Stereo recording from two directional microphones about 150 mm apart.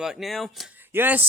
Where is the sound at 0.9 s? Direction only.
15° right (ahead or behind).